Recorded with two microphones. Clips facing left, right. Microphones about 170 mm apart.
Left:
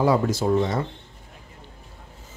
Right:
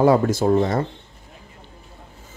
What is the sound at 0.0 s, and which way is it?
Speech, 50° right (ahead or behind).